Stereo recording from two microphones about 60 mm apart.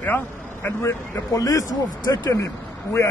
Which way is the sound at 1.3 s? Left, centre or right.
Left.